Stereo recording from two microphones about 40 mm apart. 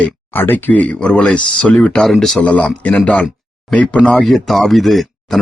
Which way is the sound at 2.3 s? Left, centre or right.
Left.